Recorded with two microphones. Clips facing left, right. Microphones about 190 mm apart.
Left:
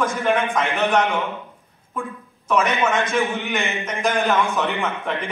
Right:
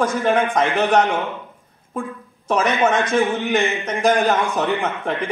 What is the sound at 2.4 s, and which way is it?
A man's voice, 35° right (ahead or behind).